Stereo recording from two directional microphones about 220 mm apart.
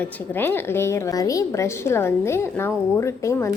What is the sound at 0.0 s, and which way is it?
A woman's voice, 10° left (ahead or behind).